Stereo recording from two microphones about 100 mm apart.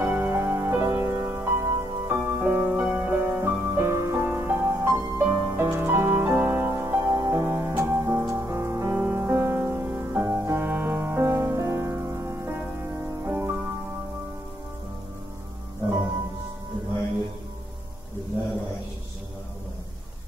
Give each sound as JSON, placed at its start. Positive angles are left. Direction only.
{"t": 0.0, "sound": "music", "side_deg": -20}
{"t": 7.4, "sound": "music", "side_deg": -20}